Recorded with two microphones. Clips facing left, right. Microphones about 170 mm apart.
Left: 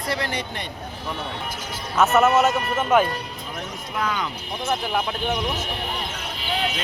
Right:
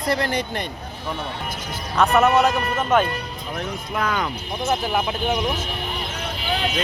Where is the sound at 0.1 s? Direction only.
45° right (ahead or behind).